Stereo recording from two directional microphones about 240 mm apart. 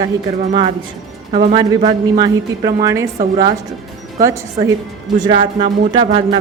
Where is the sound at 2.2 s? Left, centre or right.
Centre.